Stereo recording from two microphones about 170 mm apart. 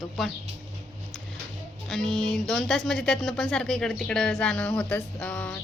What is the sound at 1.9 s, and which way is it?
Speech, centre (ahead or behind).